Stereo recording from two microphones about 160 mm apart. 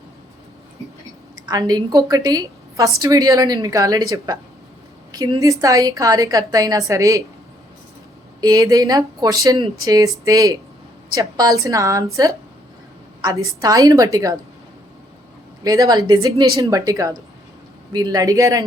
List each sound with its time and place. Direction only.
1.5 s a woman's voice: 25° right (ahead or behind)
8.4 s a woman's voice: 25° right (ahead or behind)
13.2 s a woman's voice: 20° right (ahead or behind)
15.6 s a woman's voice: 20° right (ahead or behind)